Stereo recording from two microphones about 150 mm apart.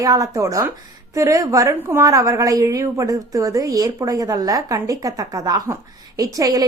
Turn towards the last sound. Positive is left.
turn(degrees=-25)  # may be behind; listen again after turning